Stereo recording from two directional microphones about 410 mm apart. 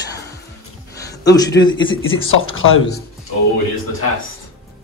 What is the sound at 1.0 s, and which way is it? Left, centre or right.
Speech, centre.